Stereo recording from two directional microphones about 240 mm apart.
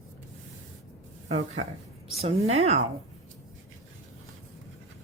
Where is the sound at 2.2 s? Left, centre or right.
Right.